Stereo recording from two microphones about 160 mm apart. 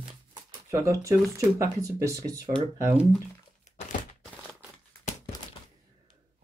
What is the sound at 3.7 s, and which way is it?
Thunk, 45° left (ahead or behind).